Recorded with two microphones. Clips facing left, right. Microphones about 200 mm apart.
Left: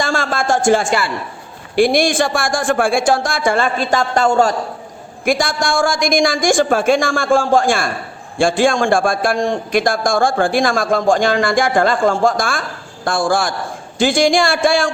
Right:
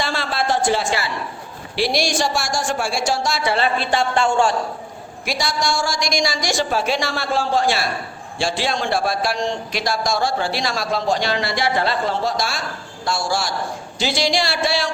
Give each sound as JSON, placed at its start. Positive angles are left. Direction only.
{"t": 0.0, "sound": "a sound", "side_deg": 45}
{"t": 1.7, "sound": "a man's voice", "side_deg": 50}
{"t": 5.2, "sound": "a man's voice", "side_deg": 50}